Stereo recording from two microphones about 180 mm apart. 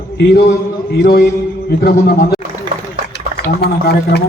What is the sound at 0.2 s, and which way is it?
A man's voice, 65° left (ahead or behind).